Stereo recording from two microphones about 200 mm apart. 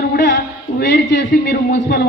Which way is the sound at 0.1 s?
50° left (ahead or behind).